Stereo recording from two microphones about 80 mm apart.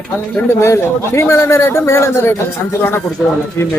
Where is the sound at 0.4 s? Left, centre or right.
Left.